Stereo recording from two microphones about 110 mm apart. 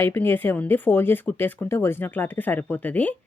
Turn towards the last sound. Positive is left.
turn(degrees=15)  # may be behind; listen again after turning